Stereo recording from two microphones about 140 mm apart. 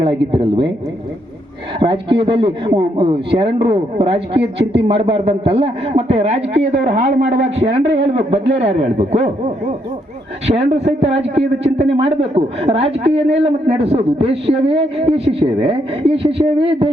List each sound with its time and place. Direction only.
0.0 s speech: 35° right (ahead or behind)
1.8 s a man's voice: 40° right (ahead or behind)
10.4 s a man's voice: 50° right (ahead or behind)